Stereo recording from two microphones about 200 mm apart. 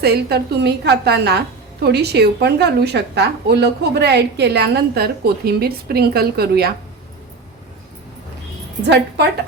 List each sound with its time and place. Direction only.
0.0 s a woman's voice: 55° right (ahead or behind)
8.9 s a woman's voice: 55° right (ahead or behind)